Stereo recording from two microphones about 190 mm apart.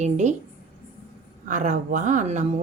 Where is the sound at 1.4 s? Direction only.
40° right (ahead or behind).